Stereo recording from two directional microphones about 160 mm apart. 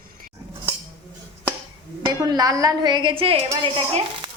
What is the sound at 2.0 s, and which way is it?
Speech, 25° right (ahead or behind).